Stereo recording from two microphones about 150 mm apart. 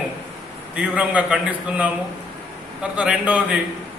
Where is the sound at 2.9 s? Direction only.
10° right (ahead or behind).